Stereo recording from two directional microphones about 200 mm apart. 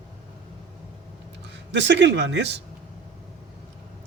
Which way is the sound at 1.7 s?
60° right (ahead or behind).